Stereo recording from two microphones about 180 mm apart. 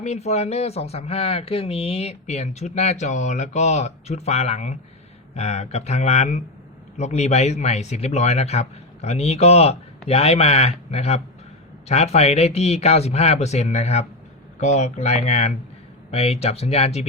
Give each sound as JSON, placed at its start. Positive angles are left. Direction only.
{"t": 0.0, "sound": "speech", "side_deg": 40}